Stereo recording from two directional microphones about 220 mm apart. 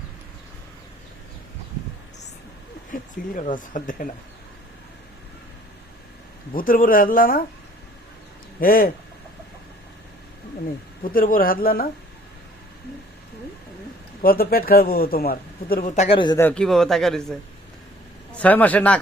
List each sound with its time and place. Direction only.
2.9 s speech: 35° left (ahead or behind)
6.5 s a man's voice: 40° left (ahead or behind)
8.6 s a man's voice: 40° left (ahead or behind)
11.0 s a man's voice: 40° left (ahead or behind)
14.2 s a man's voice: 40° left (ahead or behind); by 16.5 s 20° left (ahead or behind)
16.5 s a man's voice: 5° left (ahead or behind)
18.3 s a man's voice: 5° left (ahead or behind)